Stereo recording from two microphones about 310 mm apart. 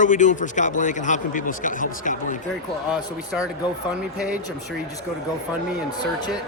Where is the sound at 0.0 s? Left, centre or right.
Left.